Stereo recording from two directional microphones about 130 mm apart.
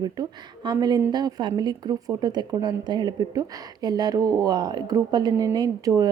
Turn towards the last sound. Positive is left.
turn(degrees=-30)  # may be behind; listen again after turning